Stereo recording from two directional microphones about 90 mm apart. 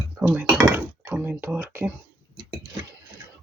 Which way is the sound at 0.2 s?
15° right (ahead or behind).